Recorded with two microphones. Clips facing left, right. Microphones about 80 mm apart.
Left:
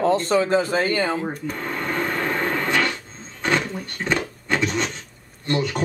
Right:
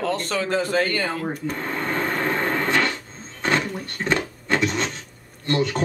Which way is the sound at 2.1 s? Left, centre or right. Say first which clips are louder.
Even; centre.